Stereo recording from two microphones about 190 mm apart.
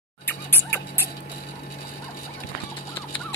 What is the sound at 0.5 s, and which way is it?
Music, 10° left (ahead or behind).